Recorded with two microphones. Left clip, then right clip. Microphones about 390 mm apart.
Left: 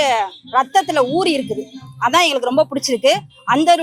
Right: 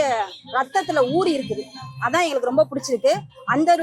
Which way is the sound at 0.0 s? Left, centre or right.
Left.